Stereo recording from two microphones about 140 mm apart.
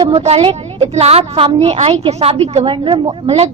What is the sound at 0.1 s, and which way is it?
A woman's voice, 45° right (ahead or behind).